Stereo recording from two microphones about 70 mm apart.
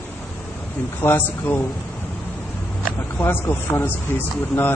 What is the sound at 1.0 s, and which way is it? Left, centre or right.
Speech, left.